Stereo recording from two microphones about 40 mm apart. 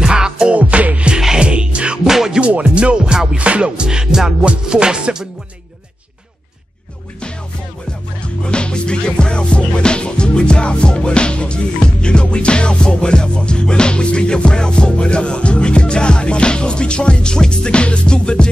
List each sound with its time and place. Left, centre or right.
0.0 s music: centre
0.6 s music: right
1.1 s music: centre
2.0 s music: centre
2.5 s music: right
3.3 s music: right
8.5 s music: left